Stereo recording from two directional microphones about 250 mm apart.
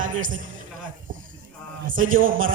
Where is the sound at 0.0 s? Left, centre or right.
Right.